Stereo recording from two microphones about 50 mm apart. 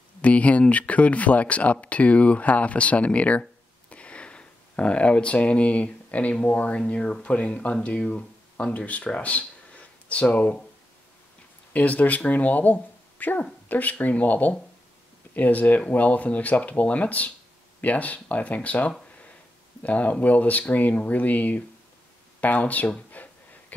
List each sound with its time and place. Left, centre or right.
0.2 s speech: left
3.9 s a sound: left
6.5 s speech: left
6.8 s speech: centre
11.7 s speech: left
23.2 s a sound: left